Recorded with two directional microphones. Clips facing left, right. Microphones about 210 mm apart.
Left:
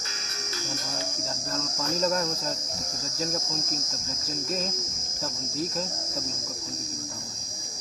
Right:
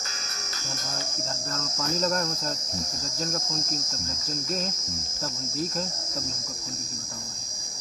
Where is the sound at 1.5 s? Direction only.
Centre (ahead or behind).